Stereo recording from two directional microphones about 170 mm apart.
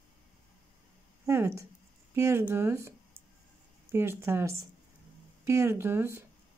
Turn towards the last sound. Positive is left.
turn(degrees=-15)  # may be behind; listen again after turning